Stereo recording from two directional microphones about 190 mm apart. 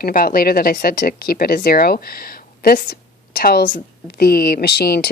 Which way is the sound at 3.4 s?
50° left (ahead or behind).